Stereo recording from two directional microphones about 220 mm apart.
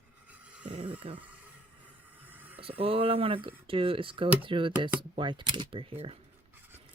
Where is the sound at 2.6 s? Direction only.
25° right (ahead or behind).